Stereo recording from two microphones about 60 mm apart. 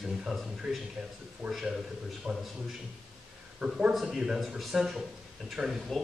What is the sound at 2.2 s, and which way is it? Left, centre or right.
Speech, right.